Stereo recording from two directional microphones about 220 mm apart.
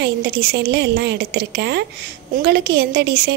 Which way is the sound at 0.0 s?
45° right (ahead or behind).